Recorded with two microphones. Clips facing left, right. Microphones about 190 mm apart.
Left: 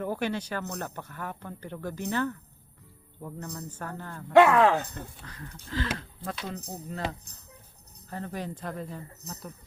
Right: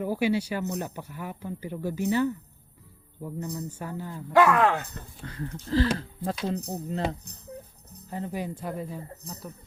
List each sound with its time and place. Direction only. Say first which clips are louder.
0.0 s speech: right 5 dB; 10° right (ahead or behind)
3.3 s speech: right 6 dB; 15° right (ahead or behind)
4.3 s speech: left 2 dB; 25° left (ahead or behind)
5.2 s speech: right 9 dB; 30° right (ahead or behind)
8.1 s speech: right 3 dB; 10° right (ahead or behind)